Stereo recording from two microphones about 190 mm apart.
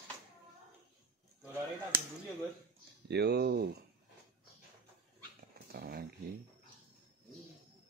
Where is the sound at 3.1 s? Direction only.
60° right (ahead or behind).